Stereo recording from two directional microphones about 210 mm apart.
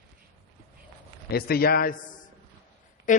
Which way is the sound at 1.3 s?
45° left (ahead or behind).